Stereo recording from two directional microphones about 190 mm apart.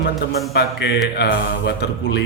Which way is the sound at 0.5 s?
60° left (ahead or behind).